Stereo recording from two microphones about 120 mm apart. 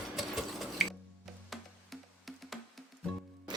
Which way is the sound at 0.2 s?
Centre (ahead or behind).